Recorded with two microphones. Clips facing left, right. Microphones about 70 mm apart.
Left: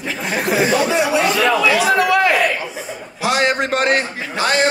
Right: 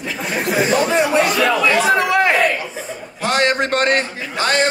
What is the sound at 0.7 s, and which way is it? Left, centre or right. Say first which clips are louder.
A man's voice: even; right.